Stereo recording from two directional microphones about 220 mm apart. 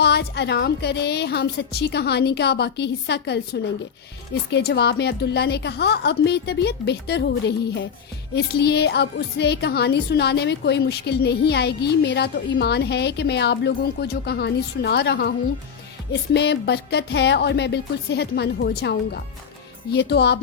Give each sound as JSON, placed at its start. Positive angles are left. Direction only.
{"t": 0.0, "sound": "a woman's voice", "side_deg": 50}
{"t": 16.3, "sound": "a woman's voice", "side_deg": 50}